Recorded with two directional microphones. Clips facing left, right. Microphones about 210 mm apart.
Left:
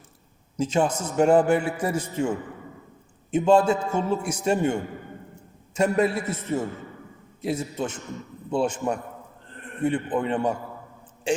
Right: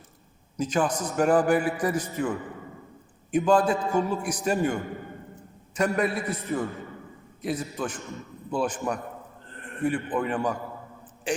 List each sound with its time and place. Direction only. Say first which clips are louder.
0.5 s a man's voice: left 2 dB; 25° left (ahead or behind)
3.3 s a man's voice: left 3 dB; 25° left (ahead or behind)